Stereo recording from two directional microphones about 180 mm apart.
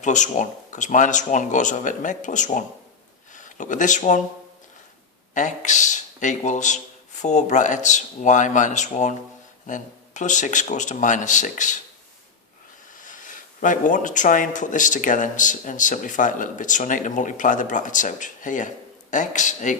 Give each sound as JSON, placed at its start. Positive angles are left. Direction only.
{"t": 0.0, "sound": "speech", "side_deg": 45}
{"t": 5.3, "sound": "speech", "side_deg": 45}
{"t": 12.9, "sound": "speech", "side_deg": 45}